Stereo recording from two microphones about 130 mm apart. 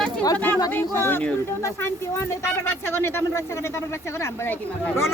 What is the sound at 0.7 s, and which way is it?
Speech, 15° left (ahead or behind).